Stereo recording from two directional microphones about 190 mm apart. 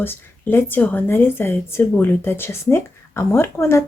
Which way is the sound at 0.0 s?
10° left (ahead or behind).